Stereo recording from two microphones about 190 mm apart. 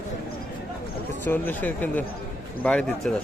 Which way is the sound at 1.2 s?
10° left (ahead or behind).